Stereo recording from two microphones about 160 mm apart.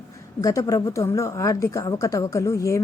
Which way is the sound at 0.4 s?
20° left (ahead or behind).